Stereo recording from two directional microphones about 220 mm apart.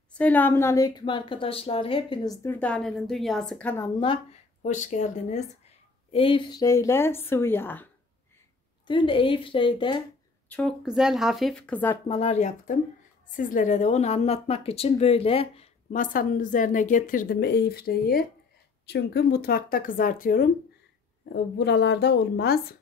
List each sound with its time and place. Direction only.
0.1 s a woman's voice: 5° left (ahead or behind); by 2.3 s 25° left (ahead or behind)
2.4 s speech: 5° left (ahead or behind)
4.6 s a woman's voice: 35° left (ahead or behind); by 7.9 s 10° left (ahead or behind)
8.8 s a woman's voice: 20° left (ahead or behind)
10.5 s speech: 5° left (ahead or behind)
12.1 s a woman's voice: 30° left (ahead or behind)
21.3 s a woman's voice: 50° left (ahead or behind)